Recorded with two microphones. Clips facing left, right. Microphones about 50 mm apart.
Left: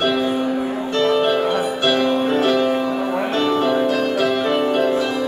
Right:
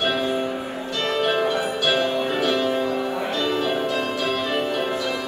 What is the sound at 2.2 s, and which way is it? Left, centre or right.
Music, left.